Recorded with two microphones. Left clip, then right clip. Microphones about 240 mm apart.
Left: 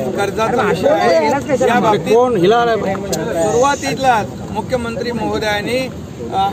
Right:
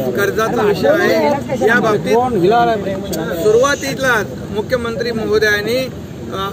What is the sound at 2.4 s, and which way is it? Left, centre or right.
Speech, left.